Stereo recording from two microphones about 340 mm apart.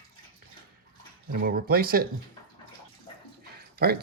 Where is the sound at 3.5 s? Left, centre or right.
Right.